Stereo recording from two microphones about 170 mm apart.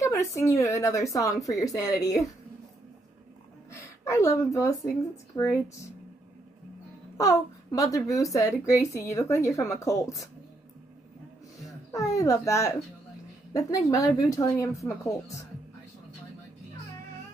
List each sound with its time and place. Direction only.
0.0 s a woman's voice: 20° left (ahead or behind)
3.7 s a woman's voice: 15° left (ahead or behind)
7.2 s a woman's voice: 20° left (ahead or behind)
11.9 s a woman's voice: 20° left (ahead or behind)